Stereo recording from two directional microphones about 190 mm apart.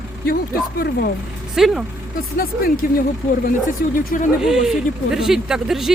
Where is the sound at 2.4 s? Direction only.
50° left (ahead or behind).